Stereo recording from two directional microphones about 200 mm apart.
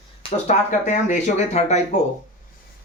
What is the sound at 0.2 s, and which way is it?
Speech, 35° left (ahead or behind).